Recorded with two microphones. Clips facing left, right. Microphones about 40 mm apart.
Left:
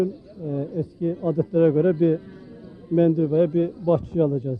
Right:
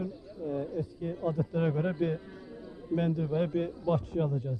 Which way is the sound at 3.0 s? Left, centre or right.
Left.